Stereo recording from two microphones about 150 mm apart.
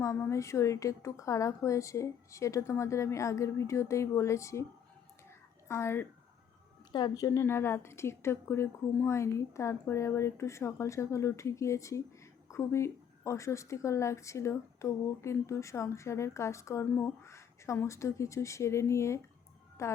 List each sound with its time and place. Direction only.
0.0 s a woman's voice: 20° left (ahead or behind)
5.6 s a woman's voice: 15° left (ahead or behind)
6.9 s a woman's voice: 30° left (ahead or behind)